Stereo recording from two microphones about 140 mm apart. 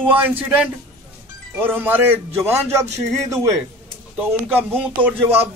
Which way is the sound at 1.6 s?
15° right (ahead or behind).